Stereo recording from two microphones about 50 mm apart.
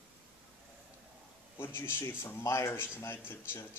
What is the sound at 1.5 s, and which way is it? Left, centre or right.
Speech, left.